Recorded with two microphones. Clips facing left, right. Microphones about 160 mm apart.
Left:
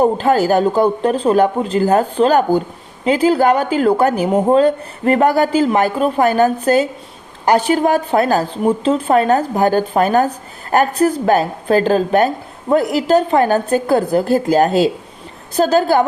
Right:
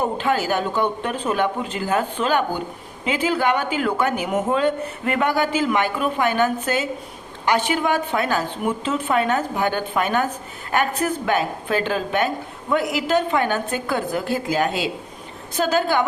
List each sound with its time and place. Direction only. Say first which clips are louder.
0.0 s a woman's voice: left 8 dB; 40° left (ahead or behind)